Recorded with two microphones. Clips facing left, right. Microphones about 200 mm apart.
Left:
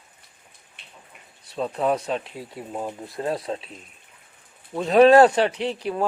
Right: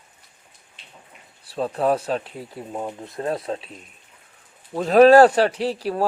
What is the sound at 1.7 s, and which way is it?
Speech, 35° right (ahead or behind).